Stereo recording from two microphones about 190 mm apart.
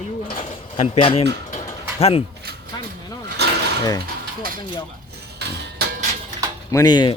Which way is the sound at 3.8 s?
20° left (ahead or behind).